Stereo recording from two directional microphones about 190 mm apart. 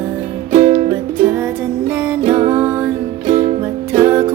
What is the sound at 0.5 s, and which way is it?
Music, 35° right (ahead or behind).